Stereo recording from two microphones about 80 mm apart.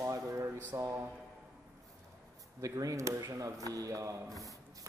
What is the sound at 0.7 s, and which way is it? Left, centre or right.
Speech, right.